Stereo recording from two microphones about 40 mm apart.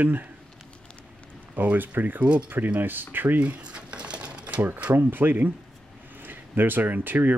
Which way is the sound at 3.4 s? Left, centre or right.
Right.